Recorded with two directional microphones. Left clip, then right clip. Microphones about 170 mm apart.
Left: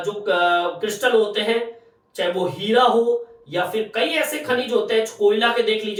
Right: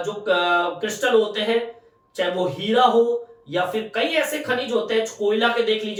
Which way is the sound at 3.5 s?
20° left (ahead or behind).